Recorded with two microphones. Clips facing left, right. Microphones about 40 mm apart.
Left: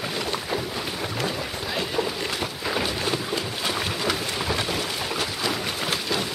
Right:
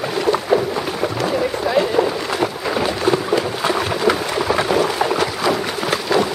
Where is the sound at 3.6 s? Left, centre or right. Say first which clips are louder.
Right 7 dB; right.